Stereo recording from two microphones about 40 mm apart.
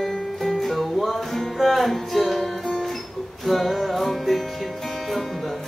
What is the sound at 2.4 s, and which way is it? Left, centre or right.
Music, centre.